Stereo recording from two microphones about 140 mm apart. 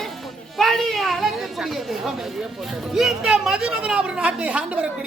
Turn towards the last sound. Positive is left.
turn(degrees=-10)  # may be behind; listen again after turning